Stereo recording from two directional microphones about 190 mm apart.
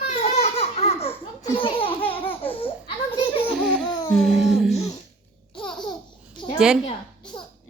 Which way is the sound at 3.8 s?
25° left (ahead or behind).